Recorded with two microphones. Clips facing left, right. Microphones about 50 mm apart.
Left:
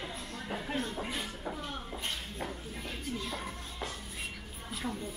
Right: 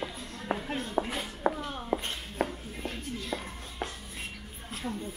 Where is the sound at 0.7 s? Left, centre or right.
Centre.